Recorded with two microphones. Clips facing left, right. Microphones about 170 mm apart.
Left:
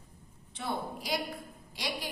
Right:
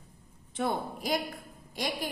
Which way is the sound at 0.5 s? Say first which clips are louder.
Right 5 dB; 50° right (ahead or behind).